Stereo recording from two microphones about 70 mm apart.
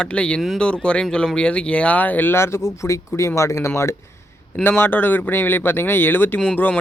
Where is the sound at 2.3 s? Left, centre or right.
Left.